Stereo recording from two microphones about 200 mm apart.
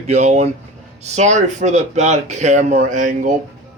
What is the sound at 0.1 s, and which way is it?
Speech, 35° right (ahead or behind).